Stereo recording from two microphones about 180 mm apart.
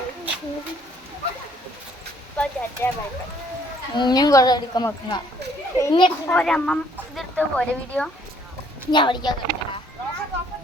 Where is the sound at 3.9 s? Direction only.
25° left (ahead or behind).